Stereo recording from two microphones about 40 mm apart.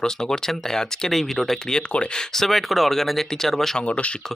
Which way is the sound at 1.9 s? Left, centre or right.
Left.